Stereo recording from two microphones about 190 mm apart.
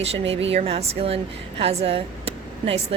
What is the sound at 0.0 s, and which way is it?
Speech, 35° right (ahead or behind).